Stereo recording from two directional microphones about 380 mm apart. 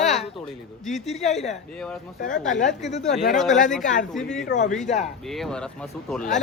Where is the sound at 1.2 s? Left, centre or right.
Centre.